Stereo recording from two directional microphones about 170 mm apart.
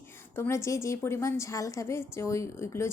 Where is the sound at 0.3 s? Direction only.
15° left (ahead or behind).